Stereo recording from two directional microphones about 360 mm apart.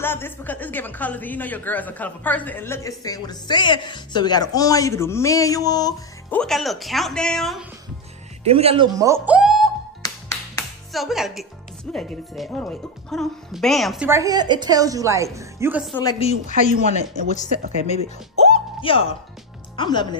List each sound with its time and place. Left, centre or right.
0.0 s a woman's voice: centre
8.5 s speech: centre
16.0 s speech: centre
18.4 s music: centre
19.8 s speech: centre